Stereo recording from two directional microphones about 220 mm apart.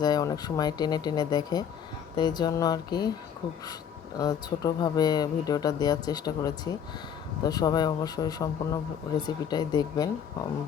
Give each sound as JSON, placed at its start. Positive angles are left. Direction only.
{"t": 0.0, "sound": "speech", "side_deg": 15}
{"t": 4.2, "sound": "speech", "side_deg": 15}